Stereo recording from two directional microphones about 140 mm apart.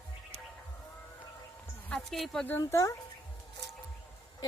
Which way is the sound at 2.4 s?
15° left (ahead or behind).